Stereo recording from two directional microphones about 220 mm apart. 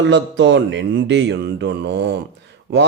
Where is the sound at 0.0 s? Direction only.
55° right (ahead or behind).